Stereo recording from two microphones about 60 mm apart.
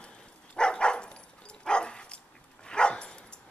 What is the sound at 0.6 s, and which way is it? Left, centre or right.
Dog, centre.